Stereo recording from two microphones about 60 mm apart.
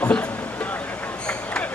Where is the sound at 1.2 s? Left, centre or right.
Centre.